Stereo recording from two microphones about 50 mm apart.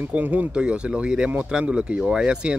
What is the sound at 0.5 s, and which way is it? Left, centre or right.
Speech, right.